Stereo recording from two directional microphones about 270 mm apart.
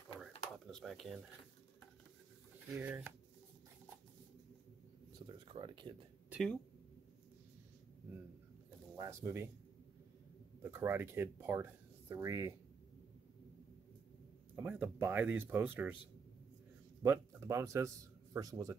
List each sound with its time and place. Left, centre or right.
0.7 s speech: centre
2.7 s speech: centre
5.2 s a sound: centre
6.3 s speech: centre
8.9 s speech: centre
10.6 s speech: centre
14.5 s speech: centre
17.0 s a man's voice: centre